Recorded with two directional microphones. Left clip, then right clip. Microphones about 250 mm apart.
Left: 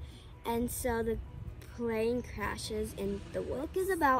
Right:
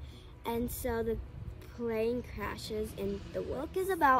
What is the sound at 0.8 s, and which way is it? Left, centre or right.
A woman's voice, centre.